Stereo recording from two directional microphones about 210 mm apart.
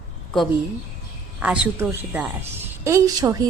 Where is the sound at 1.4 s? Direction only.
10° right (ahead or behind).